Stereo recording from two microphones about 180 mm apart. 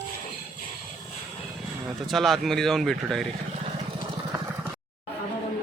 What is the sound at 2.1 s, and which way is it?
A man's voice, centre (ahead or behind).